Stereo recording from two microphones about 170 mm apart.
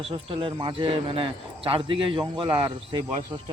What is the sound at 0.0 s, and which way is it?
Speech, 30° right (ahead or behind).